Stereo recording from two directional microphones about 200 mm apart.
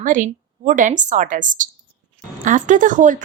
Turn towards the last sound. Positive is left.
turn(degrees=-40)  # may be behind; listen again after turning